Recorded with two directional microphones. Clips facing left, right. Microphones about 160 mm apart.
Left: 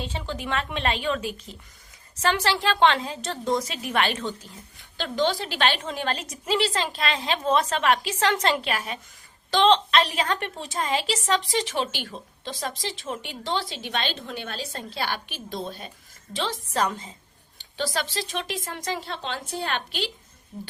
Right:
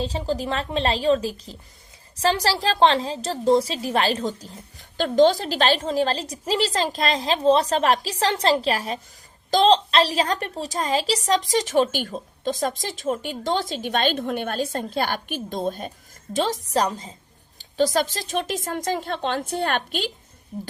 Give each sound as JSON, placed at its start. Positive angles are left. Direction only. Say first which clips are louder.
{"t": 0.0, "sound": "a woman's voice", "louder": "right 7 dB", "side_deg": -35}